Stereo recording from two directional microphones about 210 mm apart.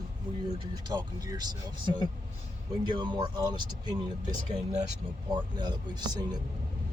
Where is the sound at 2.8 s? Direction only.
20° right (ahead or behind).